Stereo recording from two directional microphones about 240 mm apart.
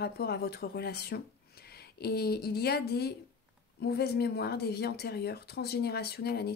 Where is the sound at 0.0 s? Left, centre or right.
Left.